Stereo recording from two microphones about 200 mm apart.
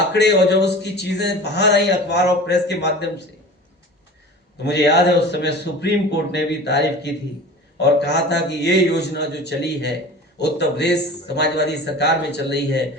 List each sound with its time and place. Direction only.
0.1 s speech: 55° left (ahead or behind)
4.6 s speech: 55° left (ahead or behind)